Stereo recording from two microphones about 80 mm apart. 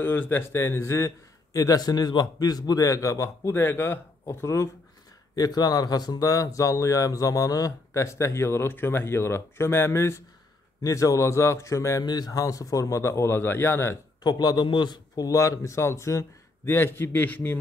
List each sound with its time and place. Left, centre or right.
0.0 s speech: left
5.3 s speech: left
12.0 s speech: left
14.2 s a man's voice: left
14.7 s a man's voice: left
15.1 s speech: left